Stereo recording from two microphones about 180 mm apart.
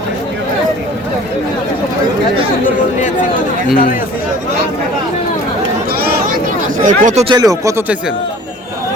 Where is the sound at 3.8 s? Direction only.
50° left (ahead or behind).